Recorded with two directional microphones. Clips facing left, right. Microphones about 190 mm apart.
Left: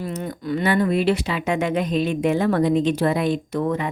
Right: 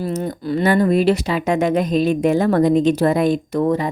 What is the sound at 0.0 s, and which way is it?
Speech, 40° right (ahead or behind).